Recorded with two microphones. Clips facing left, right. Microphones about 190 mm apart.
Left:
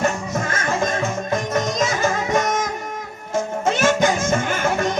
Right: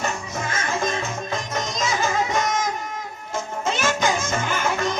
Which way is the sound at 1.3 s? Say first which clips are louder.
Left 6 dB; 55° left (ahead or behind).